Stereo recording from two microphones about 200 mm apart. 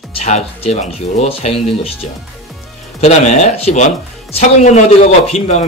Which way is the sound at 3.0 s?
35° left (ahead or behind).